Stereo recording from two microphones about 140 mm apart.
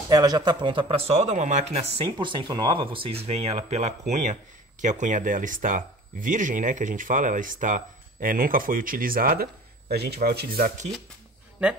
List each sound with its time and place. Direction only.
0.1 s speech: 30° right (ahead or behind); by 9.5 s 90° right
10.5 s speech: 80° right